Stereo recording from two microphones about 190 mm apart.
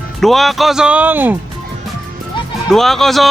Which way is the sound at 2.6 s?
Centre (ahead or behind).